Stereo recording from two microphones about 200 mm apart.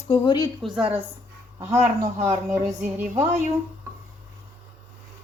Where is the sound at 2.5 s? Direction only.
10° right (ahead or behind).